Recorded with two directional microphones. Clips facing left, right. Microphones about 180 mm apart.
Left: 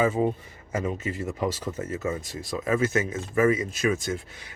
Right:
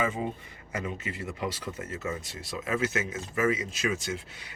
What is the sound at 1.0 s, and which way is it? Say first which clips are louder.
Speech: left 6 dB; 45° left (ahead or behind).